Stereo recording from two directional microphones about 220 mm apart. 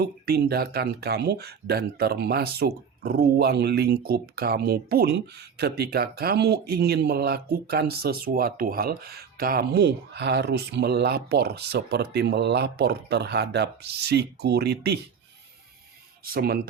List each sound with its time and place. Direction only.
0.0 s speech: 45° right (ahead or behind)
16.2 s speech: 45° right (ahead or behind)